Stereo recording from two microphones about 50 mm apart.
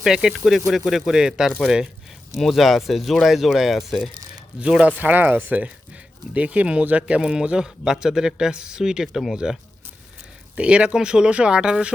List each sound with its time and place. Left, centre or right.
0.0 s speech: centre
2.3 s speech: centre
4.9 s speech: right; by 9.4 s centre
10.5 s speech: right